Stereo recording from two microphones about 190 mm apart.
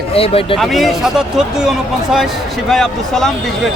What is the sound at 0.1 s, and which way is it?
Speech, 30° left (ahead or behind).